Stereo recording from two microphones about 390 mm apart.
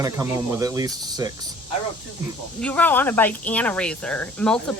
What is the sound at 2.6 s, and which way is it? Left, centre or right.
Speech, centre.